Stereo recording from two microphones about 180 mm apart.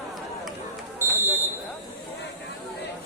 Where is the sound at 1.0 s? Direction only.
15° right (ahead or behind).